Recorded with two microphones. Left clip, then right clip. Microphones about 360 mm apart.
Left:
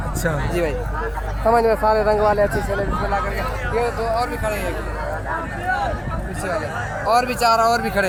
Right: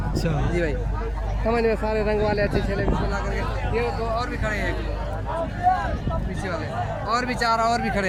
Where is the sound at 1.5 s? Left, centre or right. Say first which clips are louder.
Left 6 dB; left.